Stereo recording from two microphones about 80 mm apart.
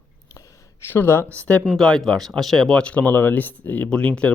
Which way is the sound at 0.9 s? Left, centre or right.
Left.